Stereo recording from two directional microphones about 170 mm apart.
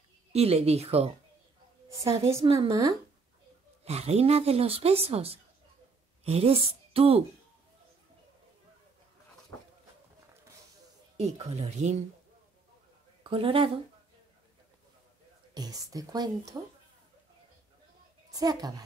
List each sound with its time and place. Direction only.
0.3 s speech: 40° right (ahead or behind)
2.4 s speech: 30° right (ahead or behind)
2.7 s speech: 20° right (ahead or behind)
3.8 s a woman's voice: 40° right (ahead or behind)
11.1 s speech: 40° right (ahead or behind)
13.2 s a woman's voice: 30° right (ahead or behind)
15.5 s speech: 20° right (ahead or behind)
18.3 s speech: 20° right (ahead or behind)